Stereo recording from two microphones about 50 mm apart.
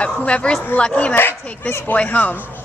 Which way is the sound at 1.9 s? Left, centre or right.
Left.